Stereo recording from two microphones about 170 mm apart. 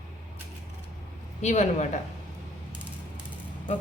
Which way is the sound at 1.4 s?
40° left (ahead or behind).